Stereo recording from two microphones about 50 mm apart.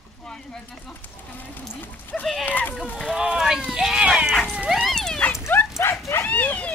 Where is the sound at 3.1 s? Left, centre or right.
Centre.